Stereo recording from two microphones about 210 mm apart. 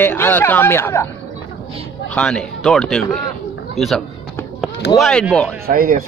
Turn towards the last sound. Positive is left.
turn(degrees=-40)  # may be behind; listen again after turning